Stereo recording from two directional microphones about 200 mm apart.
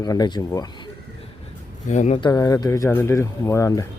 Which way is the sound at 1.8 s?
35° left (ahead or behind).